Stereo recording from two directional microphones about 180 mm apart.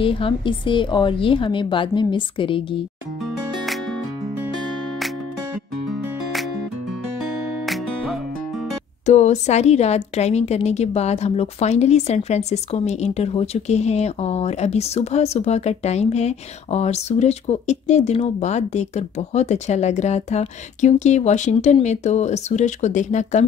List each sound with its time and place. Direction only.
0.0 s a woman's voice: 30° left (ahead or behind)
7.6 s music: centre (ahead or behind)
9.0 s a woman's voice: 40° left (ahead or behind)